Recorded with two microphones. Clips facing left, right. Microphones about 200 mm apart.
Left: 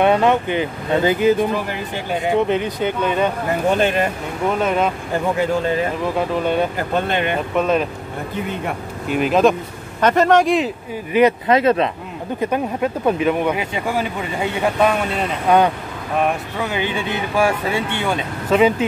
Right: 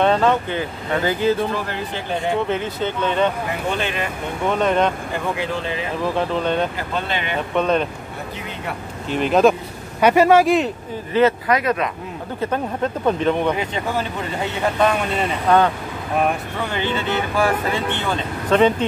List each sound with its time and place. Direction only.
0.0 s speech: 15° left (ahead or behind)
3.7 s speech: 45° left (ahead or behind)
4.5 s speech: 5° left (ahead or behind)
5.4 s speech: 45° left (ahead or behind)
6.0 s speech: 5° left (ahead or behind)
6.8 s speech: 50° left (ahead or behind)
7.5 s speech: 5° left (ahead or behind)
9.1 s speech: 5° left (ahead or behind)
11.1 s speech: 20° left (ahead or behind)
12.4 s speech: 15° left (ahead or behind)
16.5 s speech: 10° left (ahead or behind)